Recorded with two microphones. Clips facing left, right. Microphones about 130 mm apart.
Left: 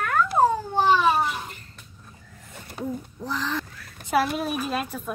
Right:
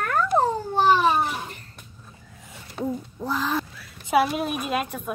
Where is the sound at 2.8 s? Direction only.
Centre (ahead or behind).